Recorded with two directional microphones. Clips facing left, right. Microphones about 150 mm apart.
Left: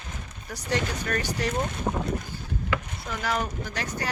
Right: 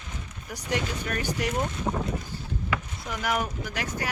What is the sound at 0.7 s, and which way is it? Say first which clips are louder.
Speech: left 2 dB; 10° right (ahead or behind).